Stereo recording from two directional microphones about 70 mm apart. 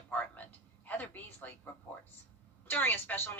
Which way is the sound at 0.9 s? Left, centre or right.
Left.